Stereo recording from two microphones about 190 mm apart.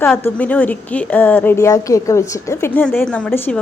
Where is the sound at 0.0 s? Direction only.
10° left (ahead or behind).